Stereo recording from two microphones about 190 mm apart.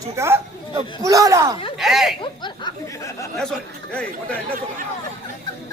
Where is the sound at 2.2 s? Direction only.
25° left (ahead or behind).